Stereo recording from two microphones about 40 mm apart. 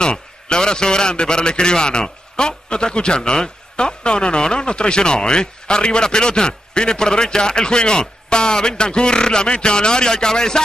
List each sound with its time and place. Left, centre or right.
0.0 s a man's voice: left